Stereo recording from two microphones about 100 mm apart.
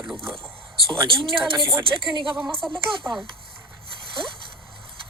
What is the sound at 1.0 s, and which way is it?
Speech, 60° right (ahead or behind).